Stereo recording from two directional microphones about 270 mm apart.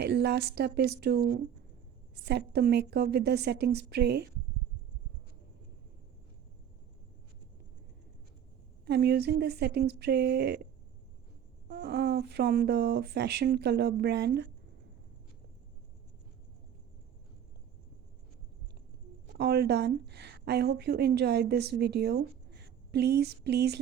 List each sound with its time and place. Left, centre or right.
0.0 s speech: right
2.2 s speech: right
8.9 s speech: right
11.7 s speech: right
19.4 s a woman's voice: right